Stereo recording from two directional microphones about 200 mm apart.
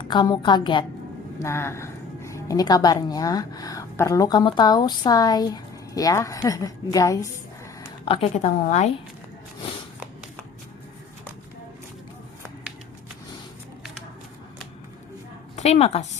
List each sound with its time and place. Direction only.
0.0 s a woman's voice: 20° left (ahead or behind)
1.4 s a woman's voice: 15° left (ahead or behind)
8.0 s a woman's voice: 30° left (ahead or behind)
15.5 s a woman's voice: 30° left (ahead or behind)